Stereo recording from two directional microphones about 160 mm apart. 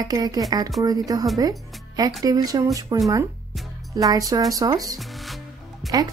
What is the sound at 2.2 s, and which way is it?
Speech, 25° right (ahead or behind).